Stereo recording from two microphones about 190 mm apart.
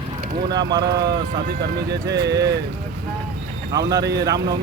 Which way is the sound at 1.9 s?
60° right (ahead or behind).